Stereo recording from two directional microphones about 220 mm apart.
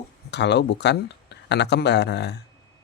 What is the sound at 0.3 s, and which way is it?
Speech, 50° left (ahead or behind).